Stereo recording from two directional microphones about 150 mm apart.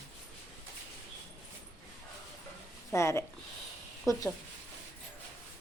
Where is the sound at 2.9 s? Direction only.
15° left (ahead or behind).